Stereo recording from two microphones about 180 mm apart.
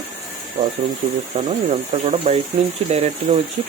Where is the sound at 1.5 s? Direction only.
35° right (ahead or behind).